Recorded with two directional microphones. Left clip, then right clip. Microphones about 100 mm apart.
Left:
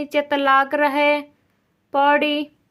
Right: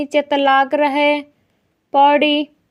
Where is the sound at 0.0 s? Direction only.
25° right (ahead or behind).